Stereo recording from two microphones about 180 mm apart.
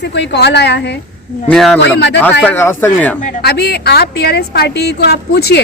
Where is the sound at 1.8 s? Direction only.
65° left (ahead or behind).